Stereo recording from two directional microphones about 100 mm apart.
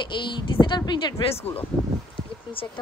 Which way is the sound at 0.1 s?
50° left (ahead or behind).